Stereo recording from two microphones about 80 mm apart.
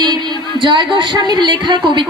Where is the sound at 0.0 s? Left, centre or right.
Right.